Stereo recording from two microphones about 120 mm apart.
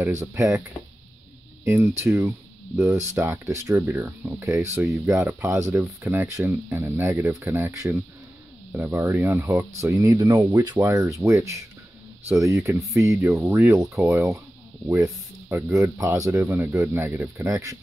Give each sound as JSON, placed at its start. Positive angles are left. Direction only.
{"t": 0.0, "sound": "speech", "side_deg": -20}
{"t": 1.6, "sound": "speech", "side_deg": -25}
{"t": 5.8, "sound": "speech", "side_deg": -15}
{"t": 15.4, "sound": "speech", "side_deg": -25}